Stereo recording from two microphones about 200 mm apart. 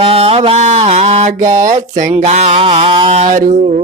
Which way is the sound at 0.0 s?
30° right (ahead or behind).